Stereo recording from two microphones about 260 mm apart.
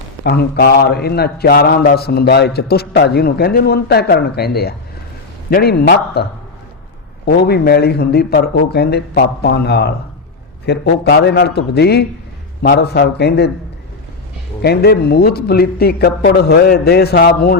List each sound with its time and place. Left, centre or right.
0.3 s a man's voice: left
7.3 s a man's voice: left
14.6 s a man's voice: left